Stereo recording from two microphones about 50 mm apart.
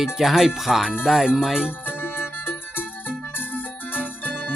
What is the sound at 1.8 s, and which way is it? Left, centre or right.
Music, left.